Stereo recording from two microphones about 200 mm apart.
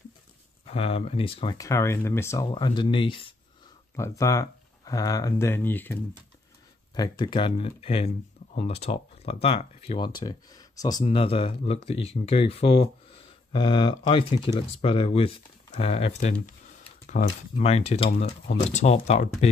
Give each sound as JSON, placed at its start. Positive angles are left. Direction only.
{"t": 0.7, "sound": "speech", "side_deg": 30}
{"t": 3.9, "sound": "speech", "side_deg": 15}
{"t": 7.0, "sound": "speech", "side_deg": 20}